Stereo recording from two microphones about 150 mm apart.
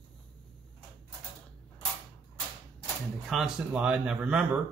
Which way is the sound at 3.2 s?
5° right (ahead or behind).